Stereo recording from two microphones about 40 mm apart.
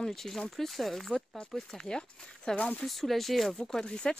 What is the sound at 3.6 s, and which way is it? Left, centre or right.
Speech, centre.